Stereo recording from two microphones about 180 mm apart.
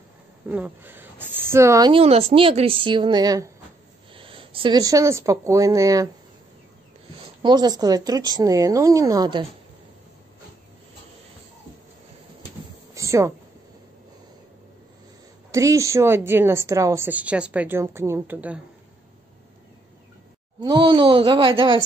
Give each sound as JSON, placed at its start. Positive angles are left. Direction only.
{"t": 0.5, "sound": "a woman's voice", "side_deg": -10}
{"t": 1.9, "sound": "a woman's voice", "side_deg": -30}
{"t": 4.1, "sound": "speech", "side_deg": -30}
{"t": 7.4, "sound": "a woman's voice", "side_deg": -20}
{"t": 12.9, "sound": "a sound", "side_deg": -15}
{"t": 15.5, "sound": "a woman's voice", "side_deg": -15}
{"t": 20.6, "sound": "a woman's voice", "side_deg": -25}